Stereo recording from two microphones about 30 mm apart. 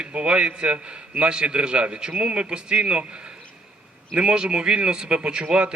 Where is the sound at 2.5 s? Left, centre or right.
Right.